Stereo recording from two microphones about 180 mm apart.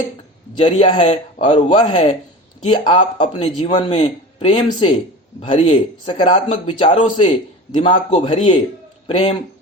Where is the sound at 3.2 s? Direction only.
30° left (ahead or behind).